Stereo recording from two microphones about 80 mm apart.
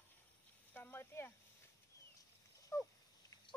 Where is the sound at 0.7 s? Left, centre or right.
Left.